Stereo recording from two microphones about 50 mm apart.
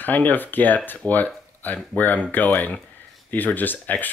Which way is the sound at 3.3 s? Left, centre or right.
Left.